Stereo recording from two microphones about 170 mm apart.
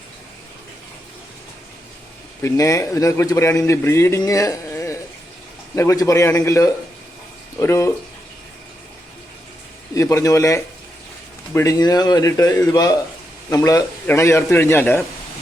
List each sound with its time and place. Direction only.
2.4 s a man's voice: 20° left (ahead or behind)
9.9 s a man's voice: 20° left (ahead or behind)